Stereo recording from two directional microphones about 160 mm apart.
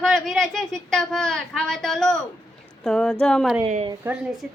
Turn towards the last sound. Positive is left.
turn(degrees=-5)  # may be behind; listen again after turning